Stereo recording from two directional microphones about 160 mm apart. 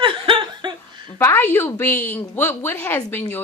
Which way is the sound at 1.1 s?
15° left (ahead or behind).